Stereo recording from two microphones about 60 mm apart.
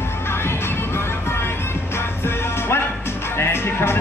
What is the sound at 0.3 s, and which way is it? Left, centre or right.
Music, left.